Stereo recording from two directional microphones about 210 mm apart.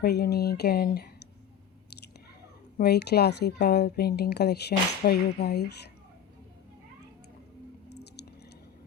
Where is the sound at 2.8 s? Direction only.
50° left (ahead or behind).